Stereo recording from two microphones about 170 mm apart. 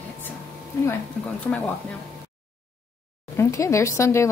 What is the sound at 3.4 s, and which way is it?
Speech, 20° left (ahead or behind).